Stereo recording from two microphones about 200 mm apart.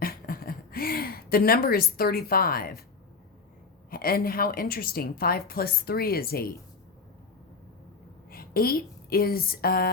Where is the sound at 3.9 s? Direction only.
50° left (ahead or behind).